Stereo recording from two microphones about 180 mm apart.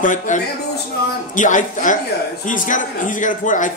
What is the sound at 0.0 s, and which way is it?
A man's voice, 45° left (ahead or behind).